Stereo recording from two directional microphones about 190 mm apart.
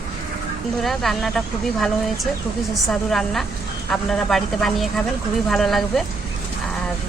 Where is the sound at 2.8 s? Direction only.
Centre (ahead or behind).